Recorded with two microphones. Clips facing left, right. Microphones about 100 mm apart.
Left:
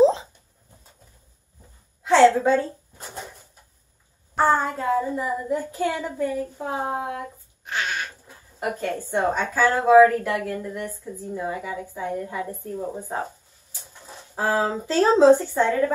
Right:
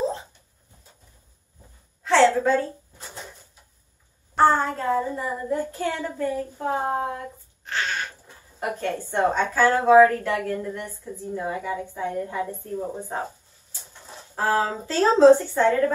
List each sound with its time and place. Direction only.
2.0 s a woman's voice: 15° left (ahead or behind)
4.4 s child singing: 5° left (ahead or behind)
7.7 s a sound: 15° left (ahead or behind)
8.5 s child singing: 5° left (ahead or behind)
14.3 s a woman's voice: 15° left (ahead or behind)